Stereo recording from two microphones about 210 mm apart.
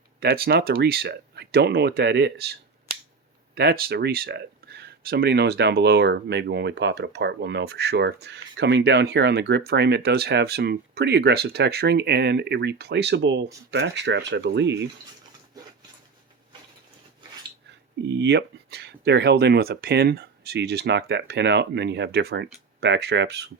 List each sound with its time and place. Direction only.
0.2 s speech: 45° right (ahead or behind)
18.1 s speech: 55° right (ahead or behind)